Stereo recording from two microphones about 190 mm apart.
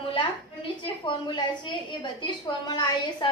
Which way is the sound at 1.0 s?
25° left (ahead or behind).